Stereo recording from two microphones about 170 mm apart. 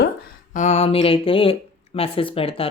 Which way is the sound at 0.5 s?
45° left (ahead or behind).